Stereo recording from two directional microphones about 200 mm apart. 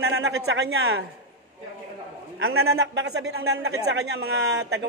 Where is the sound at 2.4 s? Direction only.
90° right.